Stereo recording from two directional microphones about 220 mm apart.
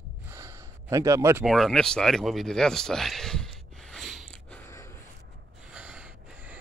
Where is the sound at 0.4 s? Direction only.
15° right (ahead or behind).